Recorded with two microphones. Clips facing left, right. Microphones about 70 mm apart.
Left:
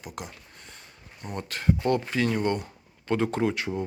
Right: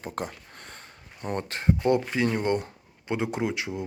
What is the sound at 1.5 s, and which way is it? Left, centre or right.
Speech, right.